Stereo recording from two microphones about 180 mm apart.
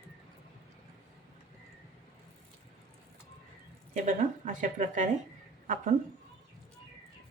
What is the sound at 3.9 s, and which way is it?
Speech, 45° right (ahead or behind).